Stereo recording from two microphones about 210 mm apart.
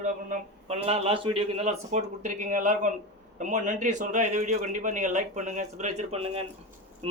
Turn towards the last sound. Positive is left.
turn(degrees=-30)  # may be behind; listen again after turning